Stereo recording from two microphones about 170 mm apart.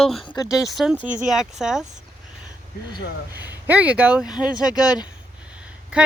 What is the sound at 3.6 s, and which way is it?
Speech, 10° right (ahead or behind).